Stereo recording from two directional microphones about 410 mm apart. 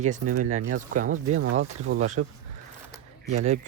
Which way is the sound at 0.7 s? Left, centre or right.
Centre.